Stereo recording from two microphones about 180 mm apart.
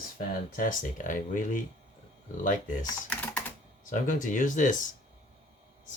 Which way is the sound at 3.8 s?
45° left (ahead or behind).